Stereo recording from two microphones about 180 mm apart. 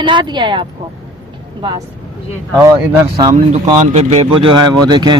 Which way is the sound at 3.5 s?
40° right (ahead or behind).